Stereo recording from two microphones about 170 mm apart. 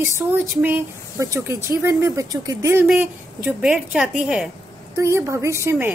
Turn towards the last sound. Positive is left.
turn(degrees=-15)  # may be behind; listen again after turning